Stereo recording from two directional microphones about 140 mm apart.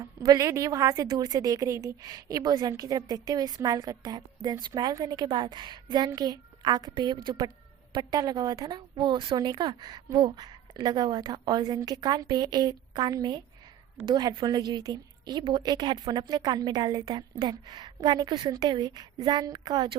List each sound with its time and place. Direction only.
0.0 s a woman's voice: 25° right (ahead or behind)